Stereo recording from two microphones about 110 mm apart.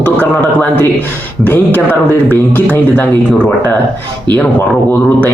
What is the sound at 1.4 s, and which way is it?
A man's voice, 15° left (ahead or behind).